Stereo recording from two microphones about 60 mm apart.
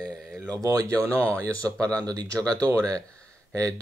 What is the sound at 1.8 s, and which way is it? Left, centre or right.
Speech, right.